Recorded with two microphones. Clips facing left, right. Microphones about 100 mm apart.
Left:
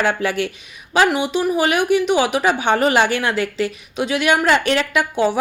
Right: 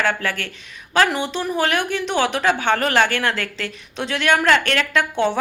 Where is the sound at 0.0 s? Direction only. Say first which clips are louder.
Left 3 dB; 15° left (ahead or behind).